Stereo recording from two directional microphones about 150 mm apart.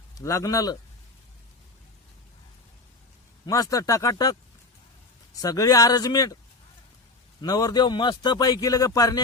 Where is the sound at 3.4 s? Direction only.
25° left (ahead or behind).